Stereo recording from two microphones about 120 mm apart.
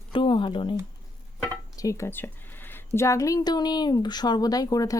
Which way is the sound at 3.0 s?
25° left (ahead or behind).